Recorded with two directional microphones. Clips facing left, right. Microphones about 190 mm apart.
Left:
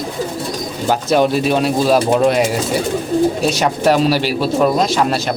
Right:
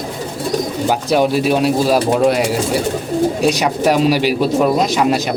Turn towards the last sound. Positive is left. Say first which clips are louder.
# right 1 dB
turn(degrees=-10)  # may be behind; listen again after turning